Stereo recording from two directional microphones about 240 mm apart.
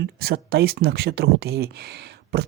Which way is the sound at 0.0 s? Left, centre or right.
Right.